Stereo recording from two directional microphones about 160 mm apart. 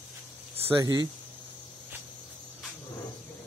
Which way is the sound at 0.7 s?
25° right (ahead or behind).